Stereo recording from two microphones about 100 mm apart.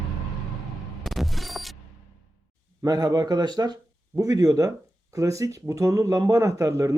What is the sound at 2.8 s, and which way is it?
Speech, 40° right (ahead or behind).